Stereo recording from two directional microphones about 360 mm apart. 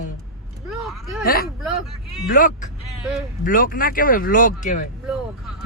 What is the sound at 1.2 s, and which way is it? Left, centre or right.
Speech, left.